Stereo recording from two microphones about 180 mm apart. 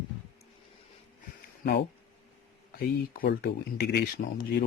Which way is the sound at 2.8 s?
55° left (ahead or behind).